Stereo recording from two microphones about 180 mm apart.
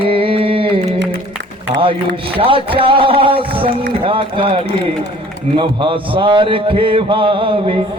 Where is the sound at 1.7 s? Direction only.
80° right.